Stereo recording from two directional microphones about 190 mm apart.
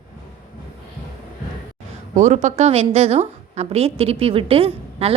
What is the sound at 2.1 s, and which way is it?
A woman's voice, 40° right (ahead or behind).